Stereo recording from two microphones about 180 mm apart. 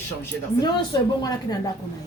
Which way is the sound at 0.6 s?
20° left (ahead or behind).